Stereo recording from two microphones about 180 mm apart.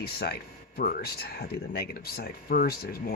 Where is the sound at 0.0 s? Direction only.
60° left (ahead or behind).